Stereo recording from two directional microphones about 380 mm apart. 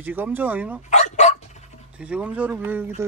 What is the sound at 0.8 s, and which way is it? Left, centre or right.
Dog, centre.